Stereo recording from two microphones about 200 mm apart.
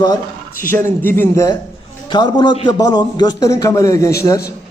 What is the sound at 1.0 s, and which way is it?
A man's voice, 10° left (ahead or behind).